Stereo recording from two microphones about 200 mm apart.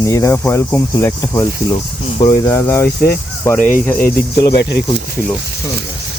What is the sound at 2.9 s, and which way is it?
Speech, 50° left (ahead or behind).